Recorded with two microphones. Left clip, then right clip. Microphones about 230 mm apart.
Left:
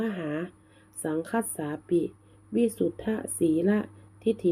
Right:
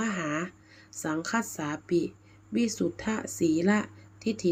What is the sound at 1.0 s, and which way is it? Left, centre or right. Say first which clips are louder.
Speech: left 1 dB; right.